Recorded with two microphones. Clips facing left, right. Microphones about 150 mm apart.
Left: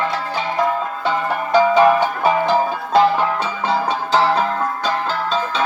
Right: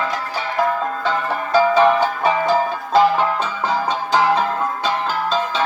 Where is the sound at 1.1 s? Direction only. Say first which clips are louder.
Left 3 dB; 15° left (ahead or behind).